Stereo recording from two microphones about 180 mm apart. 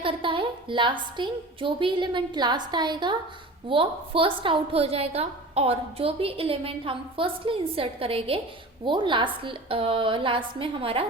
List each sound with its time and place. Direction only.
0.0 s a woman's voice: 30° right (ahead or behind)